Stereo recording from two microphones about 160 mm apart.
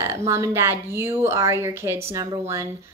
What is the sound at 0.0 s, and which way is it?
A woman's voice, 15° right (ahead or behind).